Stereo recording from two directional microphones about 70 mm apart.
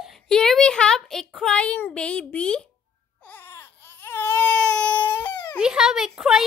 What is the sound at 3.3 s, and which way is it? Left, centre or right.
Baby cry, left.